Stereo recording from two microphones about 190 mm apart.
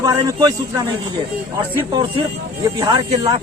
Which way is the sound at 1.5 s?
20° right (ahead or behind).